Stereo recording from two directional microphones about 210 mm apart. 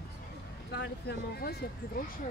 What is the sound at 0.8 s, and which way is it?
Speech, 50° left (ahead or behind).